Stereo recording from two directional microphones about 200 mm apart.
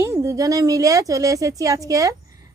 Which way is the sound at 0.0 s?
15° right (ahead or behind).